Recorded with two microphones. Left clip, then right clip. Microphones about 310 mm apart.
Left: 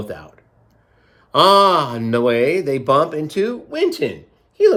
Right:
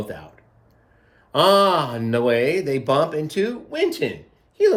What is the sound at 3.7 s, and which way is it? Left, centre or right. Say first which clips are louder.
Speech: left 3 dB; centre.